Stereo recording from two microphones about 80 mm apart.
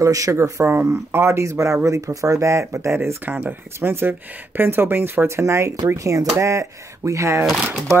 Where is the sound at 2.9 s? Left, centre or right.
Right.